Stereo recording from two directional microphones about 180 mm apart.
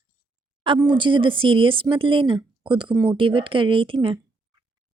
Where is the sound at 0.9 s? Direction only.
25° right (ahead or behind).